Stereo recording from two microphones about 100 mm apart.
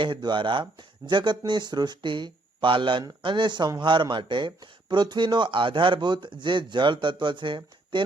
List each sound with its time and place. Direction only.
0.0 s speech: 50° right (ahead or behind)